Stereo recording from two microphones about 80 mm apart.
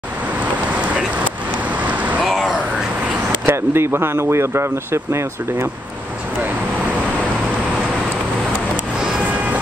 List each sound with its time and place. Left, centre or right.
1.8 s vehicle: centre
2.2 s a sound: centre
3.4 s speech: right